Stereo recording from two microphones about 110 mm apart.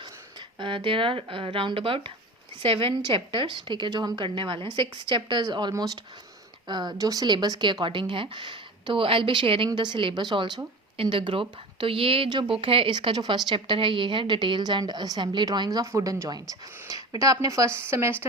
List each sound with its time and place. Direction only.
0.0 s speech: 45° right (ahead or behind); by 18.1 s 25° right (ahead or behind)